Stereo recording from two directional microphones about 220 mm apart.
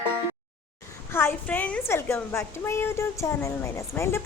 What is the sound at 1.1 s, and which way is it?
A woman's voice, 10° left (ahead or behind).